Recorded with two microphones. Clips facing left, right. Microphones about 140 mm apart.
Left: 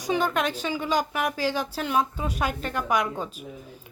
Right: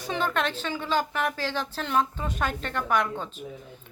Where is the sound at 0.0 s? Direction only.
10° left (ahead or behind).